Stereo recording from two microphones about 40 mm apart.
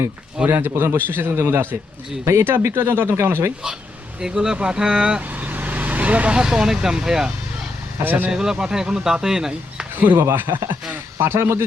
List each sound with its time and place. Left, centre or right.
0.4 s a man's voice: right
2.3 s a man's voice: right
4.2 s speech: centre
5.2 s vehicle: right
6.4 s speech: centre
8.0 s a man's voice: right
8.3 s speech: centre
10.2 s a man's voice: right
11.2 s speech: right